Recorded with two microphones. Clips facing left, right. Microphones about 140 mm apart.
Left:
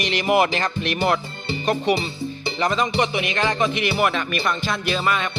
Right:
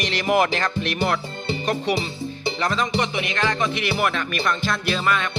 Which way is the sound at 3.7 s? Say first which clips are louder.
Left 2 dB; 5° left (ahead or behind).